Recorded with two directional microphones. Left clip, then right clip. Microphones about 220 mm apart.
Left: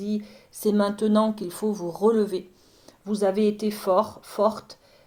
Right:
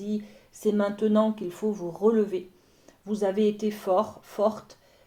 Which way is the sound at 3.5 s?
30° left (ahead or behind).